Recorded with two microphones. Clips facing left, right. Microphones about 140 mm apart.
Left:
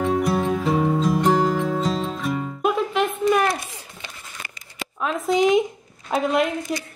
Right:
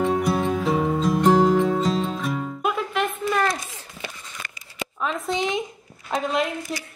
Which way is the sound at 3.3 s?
10° left (ahead or behind).